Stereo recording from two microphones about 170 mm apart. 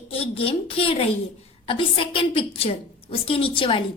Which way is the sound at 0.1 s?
35° left (ahead or behind).